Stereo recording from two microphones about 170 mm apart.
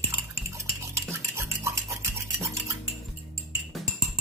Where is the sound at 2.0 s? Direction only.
15° right (ahead or behind).